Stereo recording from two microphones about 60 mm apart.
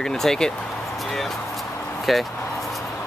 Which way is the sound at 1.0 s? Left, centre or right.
Centre.